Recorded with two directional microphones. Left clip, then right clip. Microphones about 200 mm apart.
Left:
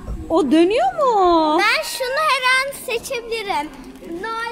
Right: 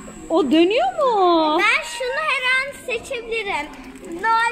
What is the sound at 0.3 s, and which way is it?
Speech, 10° left (ahead or behind).